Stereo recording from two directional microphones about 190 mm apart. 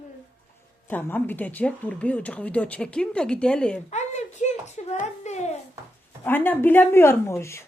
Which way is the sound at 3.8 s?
35° left (ahead or behind).